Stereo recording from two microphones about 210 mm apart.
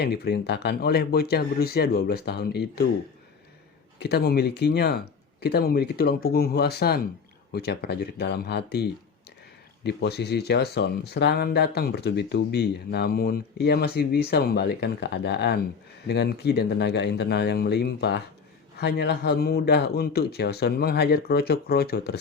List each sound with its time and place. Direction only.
0.0 s speech: 50° left (ahead or behind)
4.0 s speech: 50° left (ahead or behind)